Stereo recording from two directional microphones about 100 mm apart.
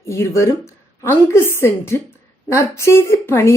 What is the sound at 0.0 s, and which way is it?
Speech, 30° left (ahead or behind).